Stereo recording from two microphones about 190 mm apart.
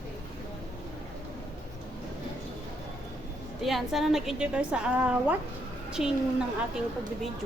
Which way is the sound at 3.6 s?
Centre (ahead or behind).